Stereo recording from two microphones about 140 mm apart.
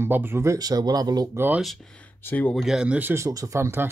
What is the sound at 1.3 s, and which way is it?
Speech, 15° right (ahead or behind).